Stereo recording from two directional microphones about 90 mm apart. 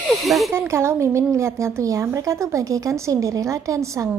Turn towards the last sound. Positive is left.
turn(degrees=-35)  # may be behind; listen again after turning